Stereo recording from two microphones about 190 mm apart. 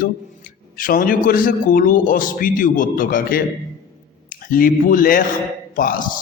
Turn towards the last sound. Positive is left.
turn(degrees=45)  # may be behind; listen again after turning